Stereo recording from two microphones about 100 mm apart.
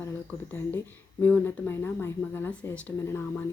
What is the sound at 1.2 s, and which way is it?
Speech, 20° left (ahead or behind).